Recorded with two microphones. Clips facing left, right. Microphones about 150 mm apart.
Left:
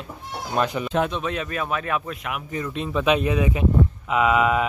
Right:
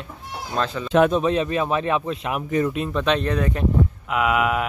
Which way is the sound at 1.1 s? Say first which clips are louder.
Right 7 dB; 30° right (ahead or behind).